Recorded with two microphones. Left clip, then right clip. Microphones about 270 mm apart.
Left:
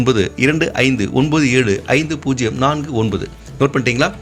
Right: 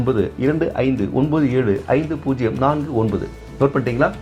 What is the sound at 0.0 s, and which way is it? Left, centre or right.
Speech, left.